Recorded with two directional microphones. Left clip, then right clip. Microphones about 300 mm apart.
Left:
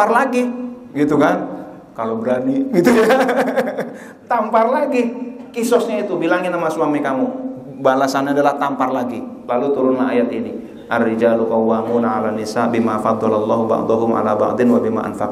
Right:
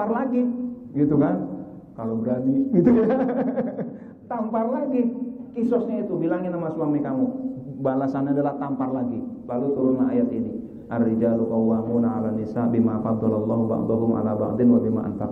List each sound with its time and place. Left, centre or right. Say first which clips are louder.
0.0 s a man's voice: left 10 dB; centre
11.4 s speech: left 7 dB; left
11.7 s a man's voice: left 8 dB; centre
14.0 s a man's voice: left 9 dB; centre